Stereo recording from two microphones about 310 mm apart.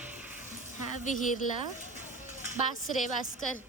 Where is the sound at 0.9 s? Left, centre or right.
Left.